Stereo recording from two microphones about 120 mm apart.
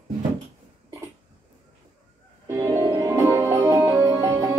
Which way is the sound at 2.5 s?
25° right (ahead or behind).